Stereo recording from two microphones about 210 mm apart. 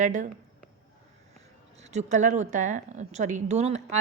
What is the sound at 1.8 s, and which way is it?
A woman's voice, 30° right (ahead or behind).